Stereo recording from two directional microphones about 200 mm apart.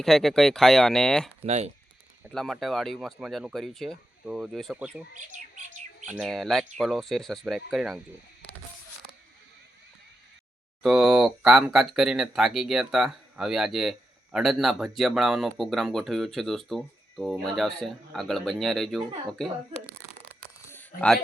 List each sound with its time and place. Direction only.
0.0 s speech: centre (ahead or behind)
1.5 s speech: 35° right (ahead or behind)
2.3 s speech: centre (ahead or behind)
6.1 s speech: 5° right (ahead or behind)
10.8 s speech: centre (ahead or behind)
20.7 s a sound: 5° left (ahead or behind)